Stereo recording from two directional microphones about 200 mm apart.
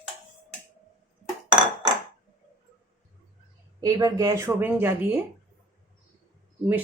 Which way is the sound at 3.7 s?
20° right (ahead or behind).